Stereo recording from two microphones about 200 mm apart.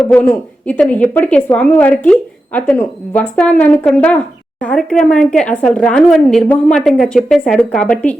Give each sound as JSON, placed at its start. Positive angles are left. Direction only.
{"t": 0.0, "sound": "a woman's voice", "side_deg": 5}